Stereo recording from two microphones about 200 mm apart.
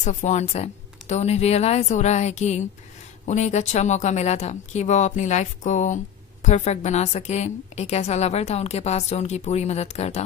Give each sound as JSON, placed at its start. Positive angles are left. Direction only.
{"t": 0.0, "sound": "a woman's voice", "side_deg": 35}